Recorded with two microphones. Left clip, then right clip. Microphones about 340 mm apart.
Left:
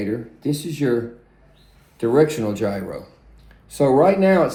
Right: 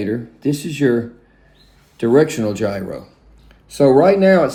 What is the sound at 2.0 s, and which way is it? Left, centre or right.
Speech, right.